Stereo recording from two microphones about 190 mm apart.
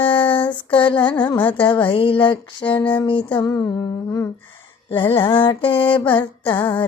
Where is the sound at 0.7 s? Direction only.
25° left (ahead or behind).